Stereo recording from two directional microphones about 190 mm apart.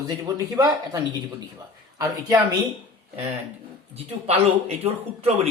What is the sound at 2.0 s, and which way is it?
Speech, 15° right (ahead or behind).